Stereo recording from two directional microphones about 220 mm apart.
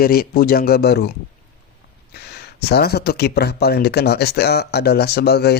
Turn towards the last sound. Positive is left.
turn(degrees=45)  # may be behind; listen again after turning